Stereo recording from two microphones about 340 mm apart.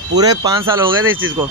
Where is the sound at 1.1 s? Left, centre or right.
Right.